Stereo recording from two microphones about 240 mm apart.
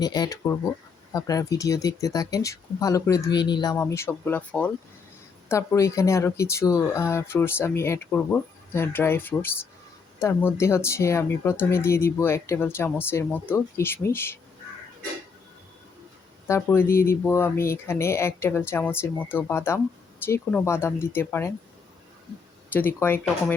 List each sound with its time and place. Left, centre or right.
0.0 s speech: centre
16.5 s speech: centre
22.7 s speech: centre